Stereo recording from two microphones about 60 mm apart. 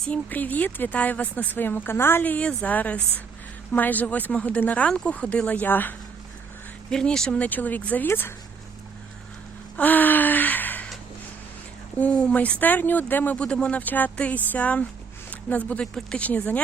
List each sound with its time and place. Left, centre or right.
0.1 s speech: left
2.2 s speech: left
6.9 s speech: centre; by 8.0 s left
8.0 s speech: left
9.7 s gasp: left
11.9 s speech: left
13.3 s speech: centre
15.8 s speech: centre
16.2 s speech: left